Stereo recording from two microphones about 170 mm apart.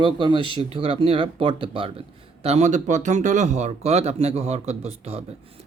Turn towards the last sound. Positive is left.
turn(degrees=-40)  # may be behind; listen again after turning